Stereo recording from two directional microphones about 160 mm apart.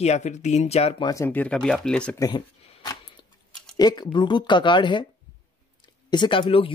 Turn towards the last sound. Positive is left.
turn(degrees=35)  # may be behind; listen again after turning